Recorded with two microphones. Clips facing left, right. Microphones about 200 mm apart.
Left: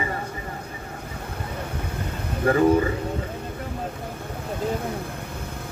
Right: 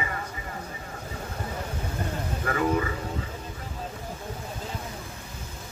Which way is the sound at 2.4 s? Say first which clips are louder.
Left 8 dB; 35° left (ahead or behind).